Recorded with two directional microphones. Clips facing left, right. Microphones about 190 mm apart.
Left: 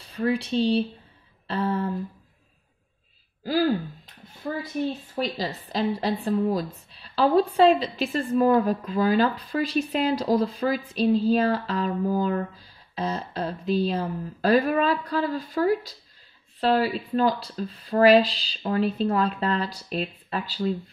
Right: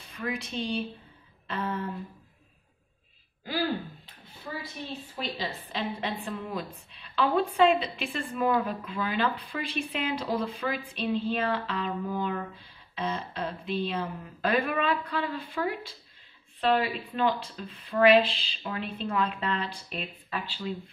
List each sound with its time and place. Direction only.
0.0 s a woman's voice: 35° left (ahead or behind)
3.4 s a woman's voice: 40° left (ahead or behind)